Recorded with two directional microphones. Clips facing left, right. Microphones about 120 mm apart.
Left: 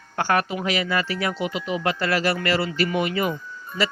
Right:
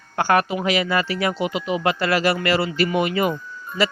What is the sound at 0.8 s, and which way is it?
Speech, 25° right (ahead or behind).